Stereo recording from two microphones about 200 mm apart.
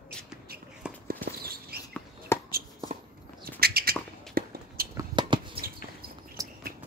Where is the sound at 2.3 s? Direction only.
15° left (ahead or behind).